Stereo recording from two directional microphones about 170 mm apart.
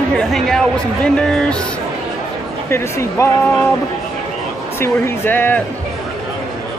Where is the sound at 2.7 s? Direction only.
15° left (ahead or behind).